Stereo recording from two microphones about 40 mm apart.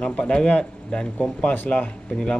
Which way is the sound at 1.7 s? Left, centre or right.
Left.